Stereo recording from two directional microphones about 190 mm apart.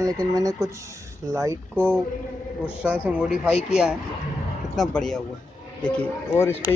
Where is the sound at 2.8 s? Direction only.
5° right (ahead or behind).